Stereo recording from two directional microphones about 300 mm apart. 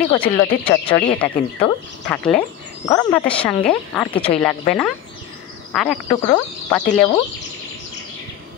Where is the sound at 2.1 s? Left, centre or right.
Centre.